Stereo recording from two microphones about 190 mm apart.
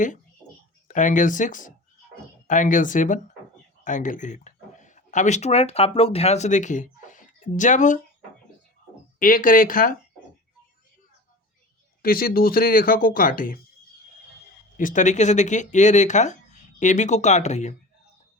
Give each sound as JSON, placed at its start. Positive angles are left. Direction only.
{"t": 0.9, "sound": "speech", "side_deg": 40}
{"t": 9.1, "sound": "speech", "side_deg": 45}
{"t": 12.0, "sound": "speech", "side_deg": 50}
{"t": 14.8, "sound": "speech", "side_deg": 40}